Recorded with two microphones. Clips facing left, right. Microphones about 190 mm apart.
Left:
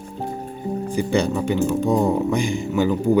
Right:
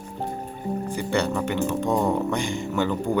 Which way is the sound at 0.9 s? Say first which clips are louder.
Left 5 dB; 15° left (ahead or behind).